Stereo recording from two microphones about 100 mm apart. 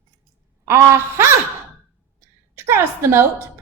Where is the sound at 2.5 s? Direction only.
25° right (ahead or behind).